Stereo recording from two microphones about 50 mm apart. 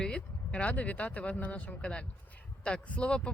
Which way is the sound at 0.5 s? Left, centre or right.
Left.